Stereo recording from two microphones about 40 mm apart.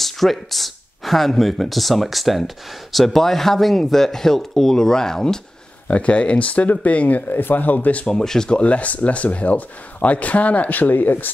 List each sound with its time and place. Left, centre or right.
0.0 s speech: centre
5.9 s speech: left
8.1 s speech: centre
8.5 s speech: left